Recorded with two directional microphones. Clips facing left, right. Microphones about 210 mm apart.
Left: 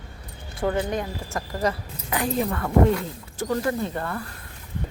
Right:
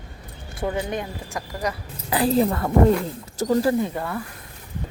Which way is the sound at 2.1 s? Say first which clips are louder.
Right 5 dB; 35° right (ahead or behind).